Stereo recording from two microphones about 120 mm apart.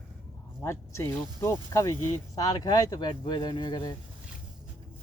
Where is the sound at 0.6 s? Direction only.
25° left (ahead or behind).